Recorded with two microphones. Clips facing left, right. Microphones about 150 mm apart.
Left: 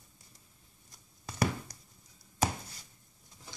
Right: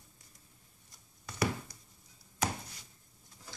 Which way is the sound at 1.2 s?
35° left (ahead or behind).